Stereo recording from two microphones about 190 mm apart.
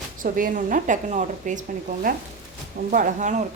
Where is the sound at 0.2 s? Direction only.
45° right (ahead or behind).